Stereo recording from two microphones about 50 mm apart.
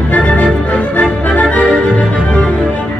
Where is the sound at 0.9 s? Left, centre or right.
Left.